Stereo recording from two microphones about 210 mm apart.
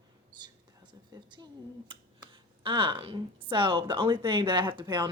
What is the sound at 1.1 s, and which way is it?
A woman's voice, 20° right (ahead or behind).